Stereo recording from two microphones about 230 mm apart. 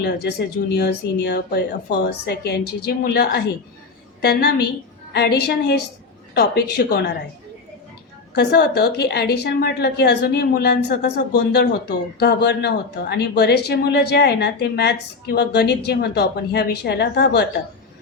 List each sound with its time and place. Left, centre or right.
0.0 s a woman's voice: left
8.4 s a woman's voice: left